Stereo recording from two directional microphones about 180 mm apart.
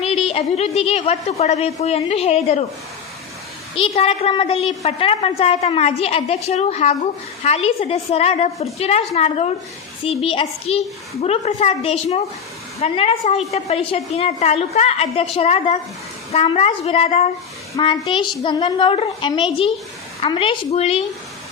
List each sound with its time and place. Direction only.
0.0 s a woman's voice: 35° left (ahead or behind)
3.8 s a woman's voice: 35° left (ahead or behind)
17.8 s a woman's voice: 20° left (ahead or behind)